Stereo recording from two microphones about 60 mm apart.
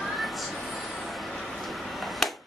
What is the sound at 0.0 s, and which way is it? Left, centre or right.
Vehicle, centre.